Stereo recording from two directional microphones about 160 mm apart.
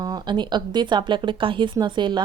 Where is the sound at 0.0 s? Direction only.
25° right (ahead or behind).